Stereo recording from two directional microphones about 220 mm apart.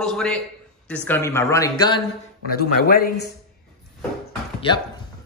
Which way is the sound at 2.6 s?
45° left (ahead or behind).